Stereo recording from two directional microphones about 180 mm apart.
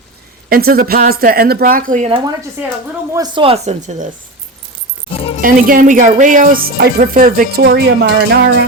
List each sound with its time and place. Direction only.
0.5 s speech: 55° right (ahead or behind)
2.0 s speech: 30° right (ahead or behind)
5.1 s music: 30° left (ahead or behind)
5.4 s speech: 50° right (ahead or behind)
7.6 s speech: 70° right (ahead or behind)